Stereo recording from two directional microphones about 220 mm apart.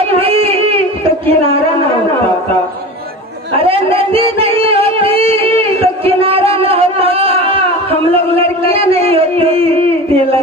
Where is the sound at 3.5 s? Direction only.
25° right (ahead or behind).